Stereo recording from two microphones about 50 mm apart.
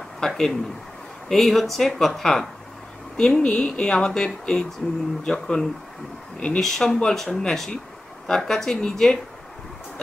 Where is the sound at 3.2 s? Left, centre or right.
Left.